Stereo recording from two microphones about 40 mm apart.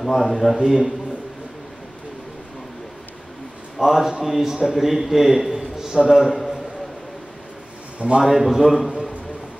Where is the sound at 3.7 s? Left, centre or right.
Centre.